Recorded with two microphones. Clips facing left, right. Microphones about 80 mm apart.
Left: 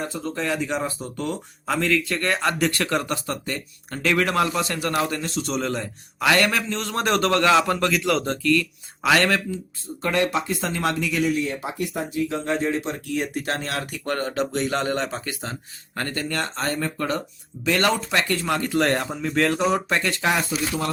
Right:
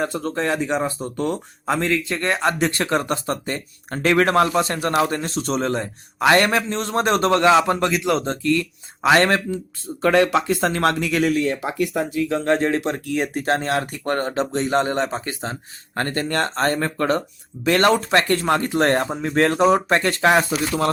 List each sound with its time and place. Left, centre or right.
0.0 s speech: right
0.5 s speech: right
1.7 s a man's voice: right
10.0 s speech: right
13.1 s speech: right